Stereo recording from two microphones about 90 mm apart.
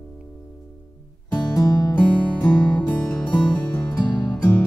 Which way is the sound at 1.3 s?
40° left (ahead or behind).